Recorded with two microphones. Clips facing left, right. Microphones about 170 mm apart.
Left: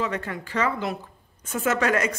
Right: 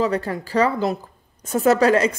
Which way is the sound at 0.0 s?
35° right (ahead or behind).